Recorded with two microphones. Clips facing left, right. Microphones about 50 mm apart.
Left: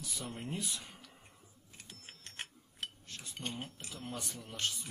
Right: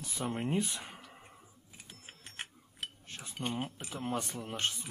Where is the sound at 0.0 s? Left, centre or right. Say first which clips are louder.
Right 7 dB; right.